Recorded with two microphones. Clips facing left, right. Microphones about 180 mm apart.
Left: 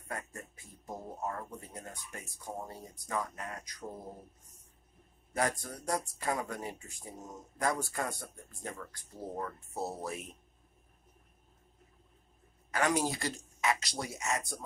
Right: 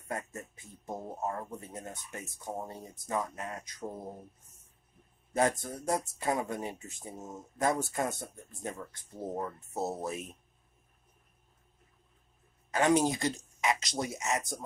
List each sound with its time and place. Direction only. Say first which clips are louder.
0.8 s speech: right 3 dB; 25° right (ahead or behind)
5.3 s speech: right 4 dB; 25° right (ahead or behind)
12.7 s speech: right 5 dB; 20° right (ahead or behind)